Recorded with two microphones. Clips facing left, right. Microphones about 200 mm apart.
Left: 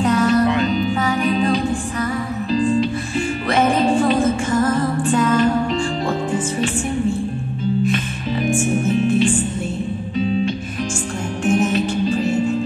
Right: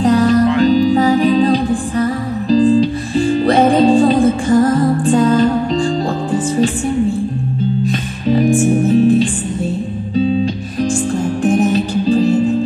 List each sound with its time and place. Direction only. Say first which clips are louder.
0.0 s music: right 4 dB; 35° right (ahead or behind)
7.8 s music: right 3 dB; 35° right (ahead or behind)